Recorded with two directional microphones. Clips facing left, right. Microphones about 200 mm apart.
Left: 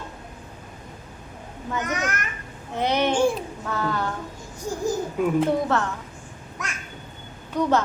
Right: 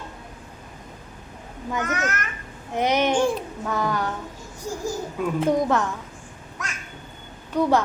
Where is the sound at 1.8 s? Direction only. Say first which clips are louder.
Right 1 dB; 15° left (ahead or behind).